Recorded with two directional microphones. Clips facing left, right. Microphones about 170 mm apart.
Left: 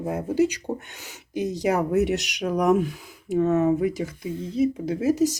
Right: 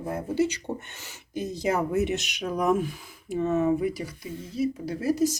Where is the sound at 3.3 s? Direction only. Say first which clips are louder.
Left 4 dB; 70° left (ahead or behind).